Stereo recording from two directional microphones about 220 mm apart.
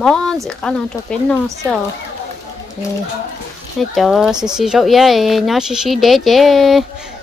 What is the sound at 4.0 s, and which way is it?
Speech, centre (ahead or behind).